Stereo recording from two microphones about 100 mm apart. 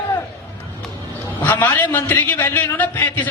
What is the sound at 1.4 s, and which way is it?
Speech, 25° left (ahead or behind).